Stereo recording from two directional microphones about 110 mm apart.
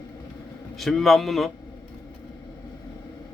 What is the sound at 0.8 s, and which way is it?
Speech, centre (ahead or behind).